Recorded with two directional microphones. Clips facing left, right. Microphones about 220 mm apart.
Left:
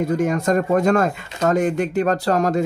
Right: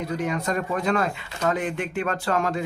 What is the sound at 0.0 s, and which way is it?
Speech, 45° left (ahead or behind).